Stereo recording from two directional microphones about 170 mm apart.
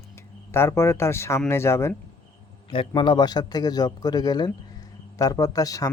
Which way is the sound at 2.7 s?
30° left (ahead or behind).